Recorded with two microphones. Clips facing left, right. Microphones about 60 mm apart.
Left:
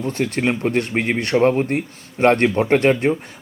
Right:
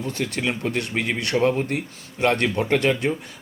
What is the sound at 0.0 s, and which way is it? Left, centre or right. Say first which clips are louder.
Speech: left 5 dB; left.